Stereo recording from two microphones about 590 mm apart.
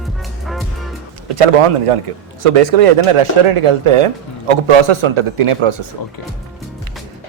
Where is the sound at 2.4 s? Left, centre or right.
Right.